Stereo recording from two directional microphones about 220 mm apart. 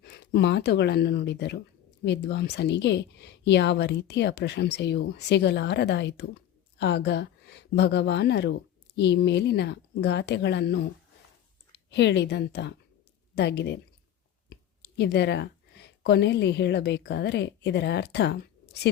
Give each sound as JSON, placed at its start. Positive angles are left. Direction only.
{"t": 0.0, "sound": "a woman's voice", "side_deg": 50}
{"t": 14.5, "sound": "a sound", "side_deg": 50}
{"t": 16.0, "sound": "a woman's voice", "side_deg": 50}